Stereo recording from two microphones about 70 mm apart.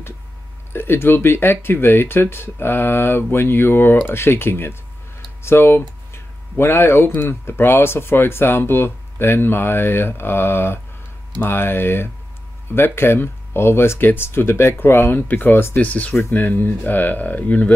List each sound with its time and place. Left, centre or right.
0.7 s speech: left
5.4 s a sound: left
7.2 s speech: left